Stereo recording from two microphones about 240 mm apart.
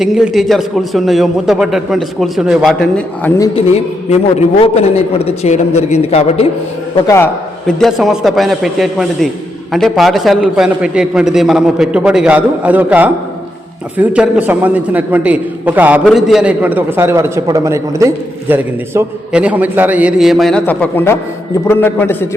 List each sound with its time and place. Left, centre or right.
0.0 s a man's voice: centre
3.3 s a man's voice: centre
4.1 s a man's voice: left
6.9 s a man's voice: centre
7.8 s a man's voice: centre